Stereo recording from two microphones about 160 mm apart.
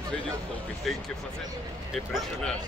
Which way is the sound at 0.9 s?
Centre (ahead or behind).